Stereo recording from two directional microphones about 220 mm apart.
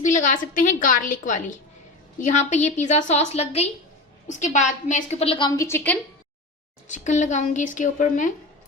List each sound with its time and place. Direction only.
0.0 s a woman's voice: 35° left (ahead or behind); by 6.0 s 10° left (ahead or behind)
6.8 s a woman's voice: 35° left (ahead or behind)